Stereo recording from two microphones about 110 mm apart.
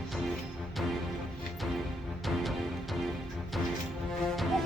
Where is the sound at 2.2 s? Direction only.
Centre (ahead or behind).